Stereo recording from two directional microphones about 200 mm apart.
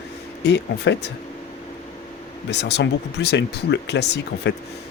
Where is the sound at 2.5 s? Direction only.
60° left (ahead or behind).